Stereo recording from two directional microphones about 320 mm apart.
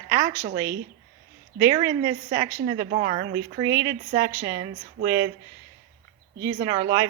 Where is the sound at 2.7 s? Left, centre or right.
Right.